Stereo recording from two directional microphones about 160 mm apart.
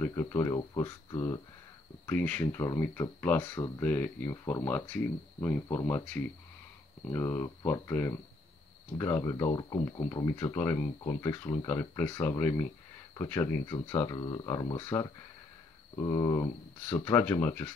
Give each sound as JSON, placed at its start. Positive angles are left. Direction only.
{"t": 0.0, "sound": "speech", "side_deg": 15}